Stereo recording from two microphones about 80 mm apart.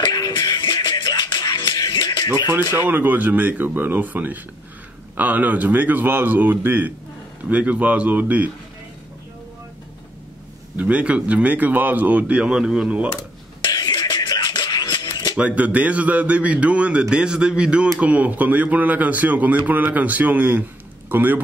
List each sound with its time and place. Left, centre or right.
0.1 s music: left
2.7 s speech: right
10.8 s a man's voice: centre
13.6 s music: left
15.3 s a man's voice: centre